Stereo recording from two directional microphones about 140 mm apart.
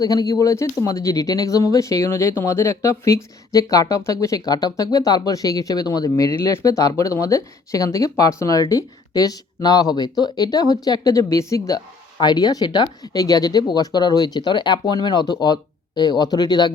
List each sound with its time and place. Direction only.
0.0 s speech: 25° left (ahead or behind)